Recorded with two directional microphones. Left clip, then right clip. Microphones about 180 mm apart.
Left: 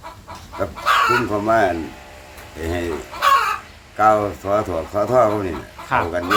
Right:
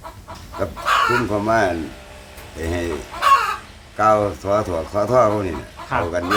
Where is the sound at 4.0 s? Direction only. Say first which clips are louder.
Left 1 dB; centre (ahead or behind).